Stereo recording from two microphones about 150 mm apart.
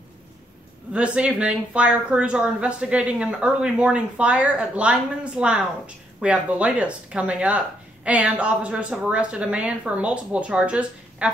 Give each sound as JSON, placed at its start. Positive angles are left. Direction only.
{"t": 0.9, "sound": "speech", "side_deg": -5}